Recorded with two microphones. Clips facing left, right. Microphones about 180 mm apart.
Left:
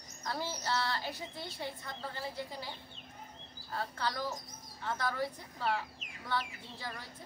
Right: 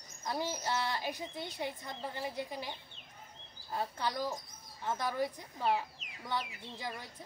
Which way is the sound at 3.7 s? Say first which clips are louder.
Right 1 dB; 15° right (ahead or behind).